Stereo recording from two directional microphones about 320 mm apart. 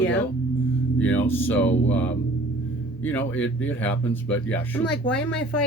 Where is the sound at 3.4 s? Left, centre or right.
Centre.